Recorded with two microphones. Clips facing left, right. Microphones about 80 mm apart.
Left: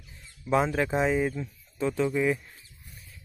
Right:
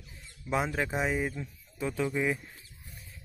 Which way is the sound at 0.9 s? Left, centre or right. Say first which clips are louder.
Left 7 dB; centre.